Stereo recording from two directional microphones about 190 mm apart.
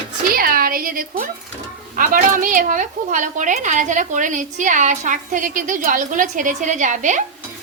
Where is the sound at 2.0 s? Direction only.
45° right (ahead or behind).